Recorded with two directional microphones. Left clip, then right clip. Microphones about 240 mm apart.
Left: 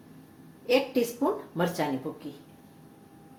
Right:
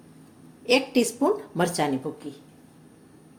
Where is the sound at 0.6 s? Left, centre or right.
Right.